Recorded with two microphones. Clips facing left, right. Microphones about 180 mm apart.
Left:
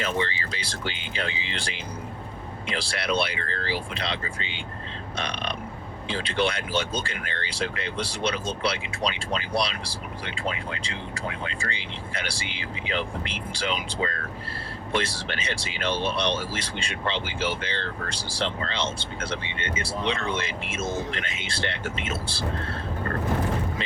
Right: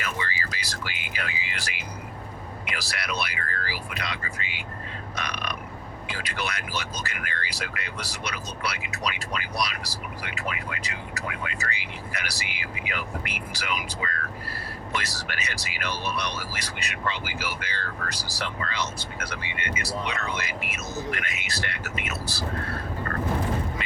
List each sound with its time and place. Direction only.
0.0 s speech: 30° left (ahead or behind)
2.7 s speech: 30° left (ahead or behind)
12.5 s speech: 10° right (ahead or behind)
12.9 s speech: 30° left (ahead or behind)